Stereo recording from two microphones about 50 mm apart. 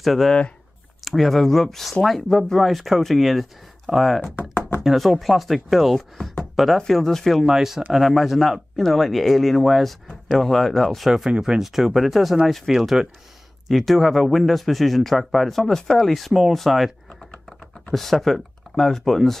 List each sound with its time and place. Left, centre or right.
0.0 s speech: centre
4.4 s knock: left
4.8 s speech: centre
7.4 s speech: centre
11.1 s speech: centre
17.9 s speech: centre